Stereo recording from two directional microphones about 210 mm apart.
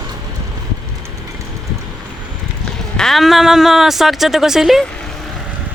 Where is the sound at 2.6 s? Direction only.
5° left (ahead or behind).